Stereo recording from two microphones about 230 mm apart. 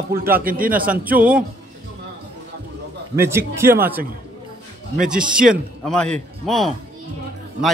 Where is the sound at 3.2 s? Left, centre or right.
Centre.